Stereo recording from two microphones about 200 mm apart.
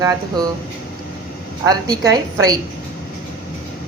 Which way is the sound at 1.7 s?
20° right (ahead or behind).